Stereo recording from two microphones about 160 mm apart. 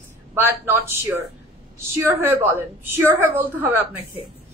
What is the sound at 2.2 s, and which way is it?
A woman's voice, 15° right (ahead or behind).